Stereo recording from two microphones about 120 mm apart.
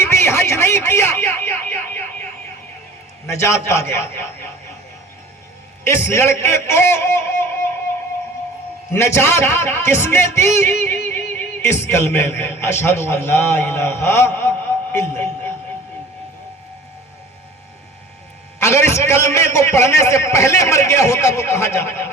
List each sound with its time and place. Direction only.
0.0 s a sound: 25° left (ahead or behind)
3.2 s a man's voice: 25° left (ahead or behind)
5.8 s a man's voice: 20° left (ahead or behind)
8.9 s a man's voice: 20° left (ahead or behind)
18.6 s a man's voice: 25° left (ahead or behind)